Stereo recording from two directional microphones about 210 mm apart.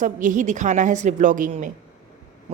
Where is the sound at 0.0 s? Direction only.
35° right (ahead or behind).